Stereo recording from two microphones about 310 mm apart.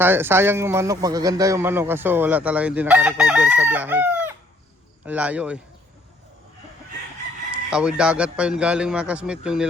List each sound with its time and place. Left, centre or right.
0.0 s a man's voice: centre
7.7 s a man's voice: centre